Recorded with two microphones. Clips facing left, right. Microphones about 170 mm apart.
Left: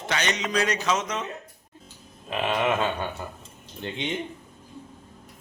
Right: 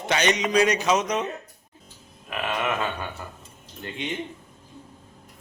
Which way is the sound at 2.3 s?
20° left (ahead or behind).